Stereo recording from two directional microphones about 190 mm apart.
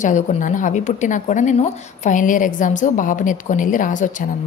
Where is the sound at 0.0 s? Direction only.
40° left (ahead or behind).